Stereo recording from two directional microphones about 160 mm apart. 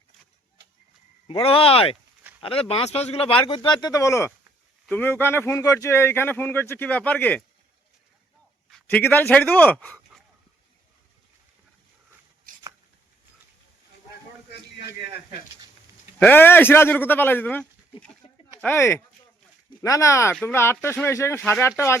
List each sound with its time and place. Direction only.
1.3 s speech: 35° left (ahead or behind); by 7.4 s 10° left (ahead or behind)
8.9 s speech: 10° left (ahead or behind)
16.2 s speech: 10° left (ahead or behind)